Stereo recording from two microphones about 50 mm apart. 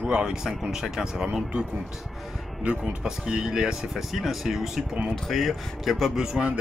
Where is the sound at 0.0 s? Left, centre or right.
Centre.